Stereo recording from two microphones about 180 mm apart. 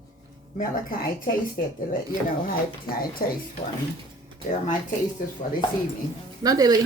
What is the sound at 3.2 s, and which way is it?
Speech, 55° left (ahead or behind).